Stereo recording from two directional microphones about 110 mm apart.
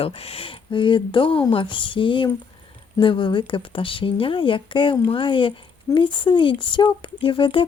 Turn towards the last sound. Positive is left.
turn(degrees=50)  # may be behind; listen again after turning